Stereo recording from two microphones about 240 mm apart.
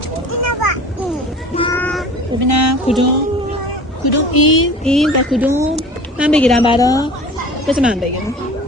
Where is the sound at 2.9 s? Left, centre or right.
Left.